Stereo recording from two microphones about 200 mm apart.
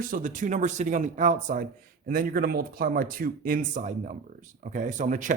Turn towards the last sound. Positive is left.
turn(degrees=-40)  # may be behind; listen again after turning